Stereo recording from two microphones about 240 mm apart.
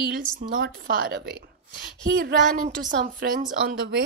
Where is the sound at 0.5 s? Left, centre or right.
Right.